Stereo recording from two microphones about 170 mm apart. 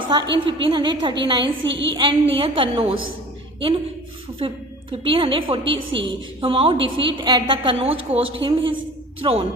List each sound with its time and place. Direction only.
0.1 s a woman's voice: 25° right (ahead or behind)
1.6 s a woman's voice: 90° right
1.9 s a woman's voice: 30° right (ahead or behind)
4.4 s a woman's voice: 30° right (ahead or behind)